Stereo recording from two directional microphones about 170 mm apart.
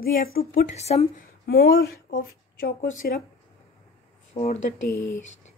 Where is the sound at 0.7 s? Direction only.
40° left (ahead or behind).